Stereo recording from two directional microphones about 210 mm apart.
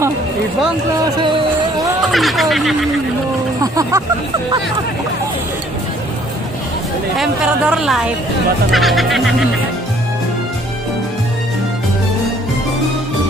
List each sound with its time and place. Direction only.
2.0 s a woman's voice: centre (ahead or behind)
3.6 s speech: 15° right (ahead or behind)
7.2 s a woman's voice: 5° right (ahead or behind)